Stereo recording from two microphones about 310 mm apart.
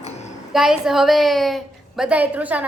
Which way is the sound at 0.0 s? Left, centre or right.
Left.